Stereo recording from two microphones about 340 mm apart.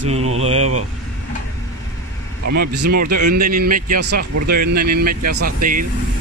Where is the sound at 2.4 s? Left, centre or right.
Right.